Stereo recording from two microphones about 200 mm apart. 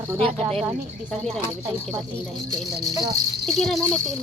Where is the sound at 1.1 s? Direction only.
Centre (ahead or behind).